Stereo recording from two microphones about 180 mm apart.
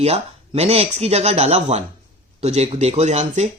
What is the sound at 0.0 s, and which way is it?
Speech, 35° right (ahead or behind).